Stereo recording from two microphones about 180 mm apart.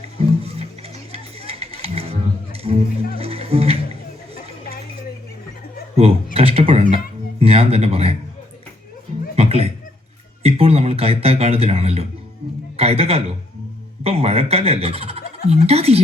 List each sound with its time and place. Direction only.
0.0 s music: 35° right (ahead or behind)
6.3 s music: 35° right (ahead or behind)
9.3 s a sound: 35° right (ahead or behind)
14.0 s turkey: 35° right (ahead or behind)
15.4 s music: 35° right (ahead or behind)